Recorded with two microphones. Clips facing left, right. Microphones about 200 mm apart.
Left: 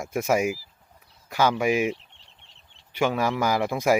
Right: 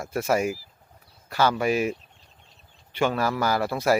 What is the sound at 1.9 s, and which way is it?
Chicken, 80° left.